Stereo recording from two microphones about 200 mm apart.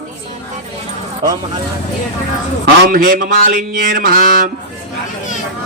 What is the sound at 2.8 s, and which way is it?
Mantra, 45° right (ahead or behind).